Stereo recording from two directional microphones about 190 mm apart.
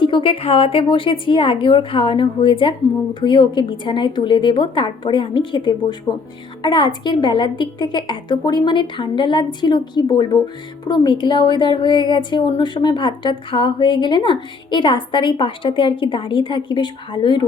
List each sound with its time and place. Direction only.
0.0 s a woman's voice: 25° left (ahead or behind)